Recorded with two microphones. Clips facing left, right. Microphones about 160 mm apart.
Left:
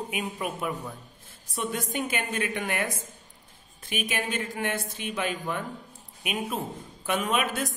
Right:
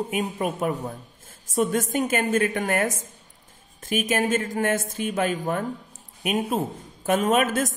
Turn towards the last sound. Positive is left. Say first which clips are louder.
# right 6 dB
turn(degrees=-45)  # may be behind; listen again after turning